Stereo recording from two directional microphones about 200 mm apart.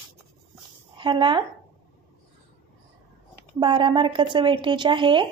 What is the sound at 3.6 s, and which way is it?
A woman's voice, 25° right (ahead or behind).